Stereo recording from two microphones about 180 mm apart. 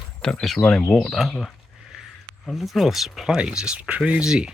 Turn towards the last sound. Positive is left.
turn(degrees=-5)  # may be behind; listen again after turning